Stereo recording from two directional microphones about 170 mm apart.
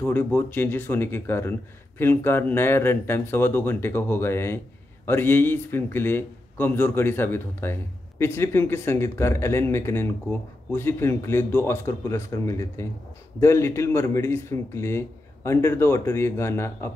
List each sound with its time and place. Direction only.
0.0 s speech: 10° left (ahead or behind)